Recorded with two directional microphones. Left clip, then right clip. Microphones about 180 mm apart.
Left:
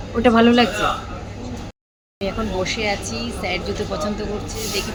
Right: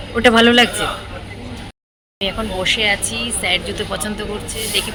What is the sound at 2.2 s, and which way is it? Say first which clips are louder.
A man's voice: right 2 dB; centre (ahead or behind).